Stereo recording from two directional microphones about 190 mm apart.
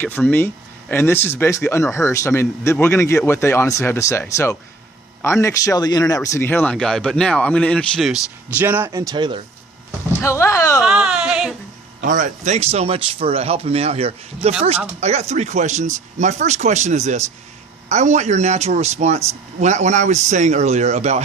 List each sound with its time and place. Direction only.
0.0 s speech: 10° left (ahead or behind); by 9.4 s 25° right (ahead or behind)
10.2 s speech: 15° left (ahead or behind)
10.8 s speech: 5° right (ahead or behind)
11.9 s speech: 40° right (ahead or behind)